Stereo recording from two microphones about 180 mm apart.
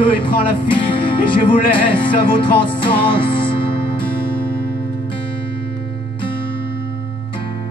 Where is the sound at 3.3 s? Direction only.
30° left (ahead or behind).